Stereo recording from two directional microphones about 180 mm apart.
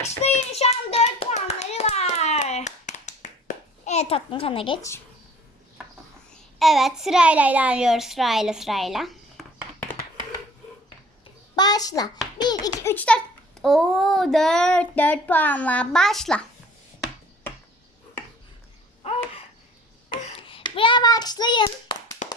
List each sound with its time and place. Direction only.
0.2 s hands: 35° left (ahead or behind)
6.3 s a child's voice: centre (ahead or behind)
11.5 s a child's voice: 20° left (ahead or behind); by 16.4 s centre (ahead or behind)
19.0 s a sound: 35° left (ahead or behind)
20.2 s hands: 30° left (ahead or behind)